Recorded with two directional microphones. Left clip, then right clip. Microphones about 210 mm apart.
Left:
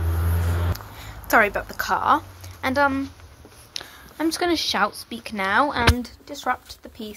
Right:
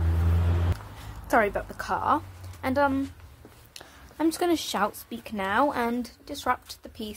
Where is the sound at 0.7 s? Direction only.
Centre (ahead or behind).